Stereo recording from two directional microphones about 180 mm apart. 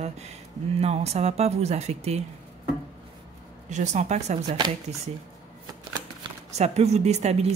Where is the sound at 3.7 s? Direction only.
40° right (ahead or behind).